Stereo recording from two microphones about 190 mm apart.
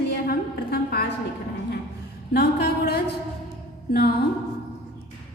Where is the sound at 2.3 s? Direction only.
55° left (ahead or behind).